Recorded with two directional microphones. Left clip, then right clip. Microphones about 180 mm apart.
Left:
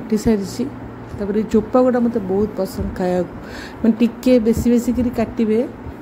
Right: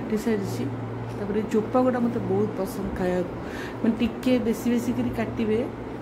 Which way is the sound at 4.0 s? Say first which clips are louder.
Left 11 dB; 30° left (ahead or behind).